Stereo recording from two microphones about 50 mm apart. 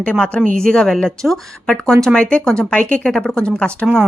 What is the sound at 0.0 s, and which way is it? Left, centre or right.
Speech, left.